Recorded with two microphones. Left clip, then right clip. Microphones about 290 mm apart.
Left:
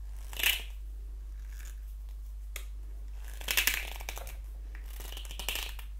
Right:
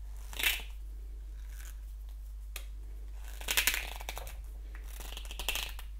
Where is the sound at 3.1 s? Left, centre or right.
Centre.